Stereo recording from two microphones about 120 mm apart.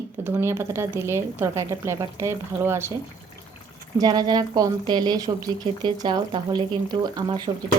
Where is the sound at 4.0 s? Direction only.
35° right (ahead or behind).